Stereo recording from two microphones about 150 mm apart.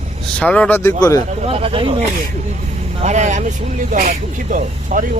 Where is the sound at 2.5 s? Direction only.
50° right (ahead or behind).